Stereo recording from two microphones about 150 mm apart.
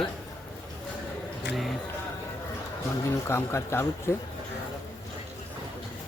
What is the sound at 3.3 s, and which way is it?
Speech, 15° left (ahead or behind).